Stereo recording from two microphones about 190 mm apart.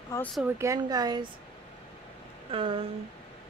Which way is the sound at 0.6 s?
15° right (ahead or behind).